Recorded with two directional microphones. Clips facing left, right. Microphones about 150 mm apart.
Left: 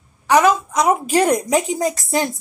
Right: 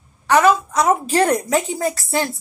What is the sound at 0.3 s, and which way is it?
A woman's voice, 15° left (ahead or behind).